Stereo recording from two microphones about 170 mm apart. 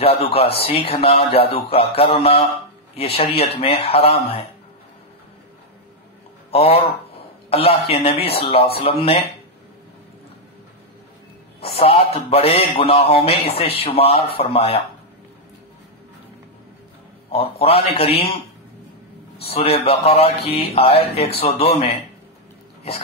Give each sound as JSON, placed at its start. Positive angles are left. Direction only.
{"t": 0.0, "sound": "speech", "side_deg": 35}
{"t": 6.5, "sound": "a man's voice", "side_deg": 35}
{"t": 11.7, "sound": "speech", "side_deg": 35}
{"t": 17.3, "sound": "speech", "side_deg": 35}
{"t": 19.4, "sound": "speech", "side_deg": 35}